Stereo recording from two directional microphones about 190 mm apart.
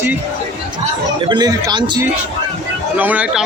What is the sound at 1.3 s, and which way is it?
Speech, 20° right (ahead or behind).